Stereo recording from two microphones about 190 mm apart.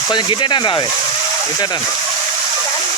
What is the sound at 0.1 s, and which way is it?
Speech, 25° left (ahead or behind).